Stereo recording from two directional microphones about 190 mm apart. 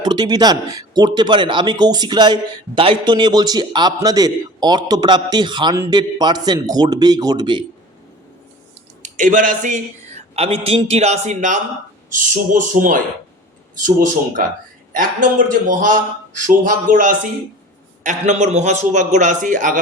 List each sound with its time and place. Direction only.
0.0 s speech: 20° right (ahead or behind)
9.0 s a man's voice: 40° right (ahead or behind)